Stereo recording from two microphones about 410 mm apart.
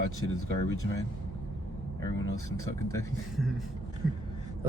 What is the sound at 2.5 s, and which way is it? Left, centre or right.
Speech, centre.